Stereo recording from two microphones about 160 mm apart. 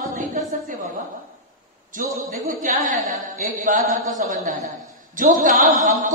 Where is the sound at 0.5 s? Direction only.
55° right (ahead or behind).